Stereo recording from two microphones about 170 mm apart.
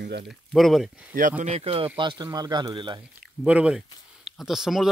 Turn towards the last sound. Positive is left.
turn(degrees=0)  # may be behind; listen again after turning